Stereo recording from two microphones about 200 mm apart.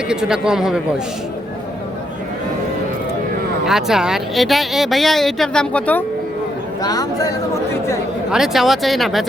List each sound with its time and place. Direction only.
0.1 s speech: 5° right (ahead or behind)
3.7 s speech: centre (ahead or behind)
6.8 s speech: 20° left (ahead or behind)
8.3 s speech: centre (ahead or behind)